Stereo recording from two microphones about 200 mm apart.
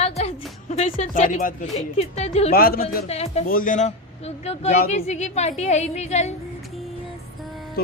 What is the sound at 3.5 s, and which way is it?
Speech, 45° left (ahead or behind).